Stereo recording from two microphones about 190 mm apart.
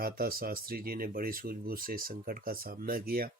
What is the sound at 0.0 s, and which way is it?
Speech, 50° right (ahead or behind).